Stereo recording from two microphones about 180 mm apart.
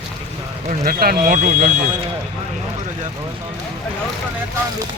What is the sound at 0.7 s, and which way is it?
Speech, 55° right (ahead or behind).